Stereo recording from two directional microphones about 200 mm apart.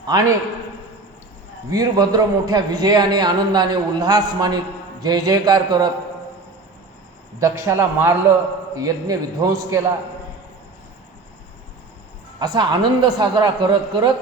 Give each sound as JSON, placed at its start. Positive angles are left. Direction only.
{"t": 0.0, "sound": "a man's voice", "side_deg": -20}
{"t": 1.7, "sound": "a man's voice", "side_deg": -20}
{"t": 7.3, "sound": "a man's voice", "side_deg": -15}
{"t": 12.4, "sound": "a man's voice", "side_deg": -20}